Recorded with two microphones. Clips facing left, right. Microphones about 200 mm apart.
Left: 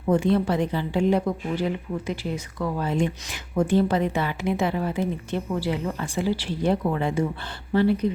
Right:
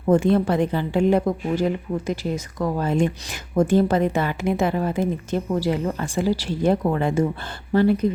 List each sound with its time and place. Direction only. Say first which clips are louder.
0.1 s a woman's voice: right 3 dB; 50° right (ahead or behind)